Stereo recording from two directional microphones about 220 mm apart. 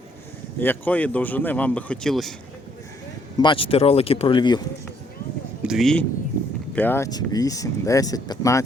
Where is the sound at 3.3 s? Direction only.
20° left (ahead or behind).